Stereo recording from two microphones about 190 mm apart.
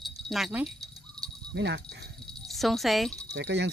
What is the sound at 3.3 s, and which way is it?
Speech, 65° right (ahead or behind).